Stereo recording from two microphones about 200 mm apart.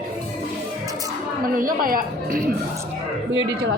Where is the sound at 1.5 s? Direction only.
45° right (ahead or behind).